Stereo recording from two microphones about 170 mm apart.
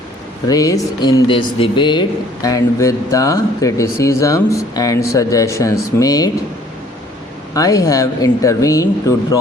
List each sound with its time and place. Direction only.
0.4 s speech: 20° left (ahead or behind)
7.5 s speech: 20° left (ahead or behind)